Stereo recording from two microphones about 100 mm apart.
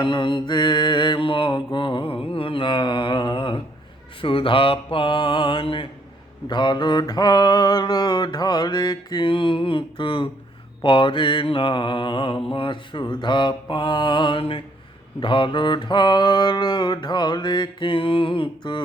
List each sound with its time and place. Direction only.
0.0 s mantra: 50° left (ahead or behind)
6.5 s mantra: 50° left (ahead or behind)